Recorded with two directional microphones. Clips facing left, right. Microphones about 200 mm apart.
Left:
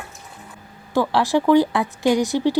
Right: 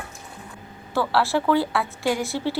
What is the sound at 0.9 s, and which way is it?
Speech, 15° left (ahead or behind).